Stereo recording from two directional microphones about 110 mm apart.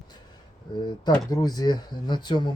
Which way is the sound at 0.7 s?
45° left (ahead or behind).